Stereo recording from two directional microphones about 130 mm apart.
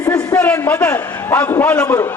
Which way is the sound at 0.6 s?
15° left (ahead or behind).